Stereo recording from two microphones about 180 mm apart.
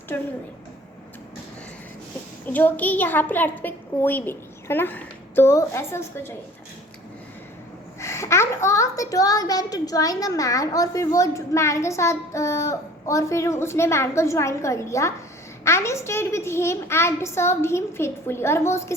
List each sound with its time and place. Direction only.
0.1 s a woman's voice: 10° left (ahead or behind)
2.5 s a woman's voice: 10° left (ahead or behind)
7.9 s a woman's voice: 15° left (ahead or behind)